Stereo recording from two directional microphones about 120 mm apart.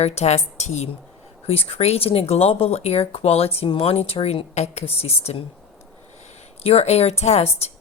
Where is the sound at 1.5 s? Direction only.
50° left (ahead or behind).